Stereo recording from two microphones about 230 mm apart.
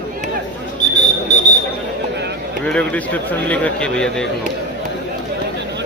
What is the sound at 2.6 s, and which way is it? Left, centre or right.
Speech, centre.